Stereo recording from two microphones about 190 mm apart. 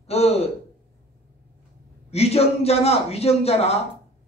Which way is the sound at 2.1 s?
35° left (ahead or behind).